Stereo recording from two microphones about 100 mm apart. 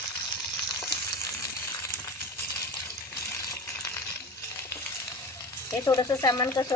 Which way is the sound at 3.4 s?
35° left (ahead or behind).